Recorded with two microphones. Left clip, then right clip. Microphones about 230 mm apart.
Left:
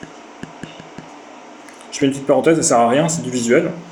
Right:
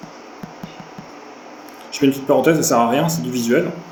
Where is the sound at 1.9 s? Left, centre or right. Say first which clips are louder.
Even; left.